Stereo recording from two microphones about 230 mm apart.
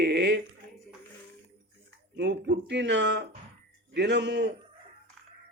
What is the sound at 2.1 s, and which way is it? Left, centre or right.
Speech, right.